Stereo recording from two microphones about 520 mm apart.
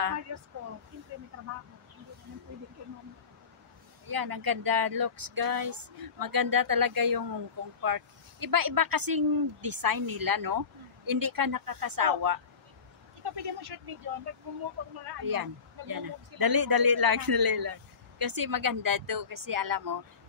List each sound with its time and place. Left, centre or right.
0.0 s speech: right
4.1 s speech: right